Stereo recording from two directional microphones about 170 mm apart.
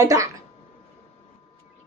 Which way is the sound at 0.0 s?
20° right (ahead or behind).